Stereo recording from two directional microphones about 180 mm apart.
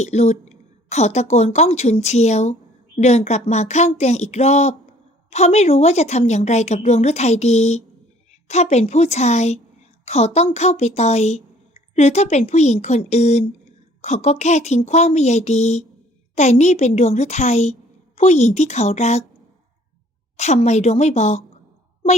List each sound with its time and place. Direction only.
0.0 s speech: 40° left (ahead or behind)
20.3 s speech: 40° left (ahead or behind)